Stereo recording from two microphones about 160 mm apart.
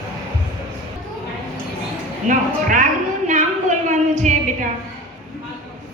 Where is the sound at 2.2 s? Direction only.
50° right (ahead or behind).